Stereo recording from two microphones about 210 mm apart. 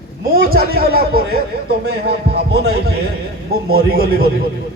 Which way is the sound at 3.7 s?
45° right (ahead or behind).